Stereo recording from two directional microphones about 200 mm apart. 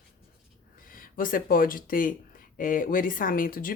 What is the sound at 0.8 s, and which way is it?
Speech, 45° left (ahead or behind).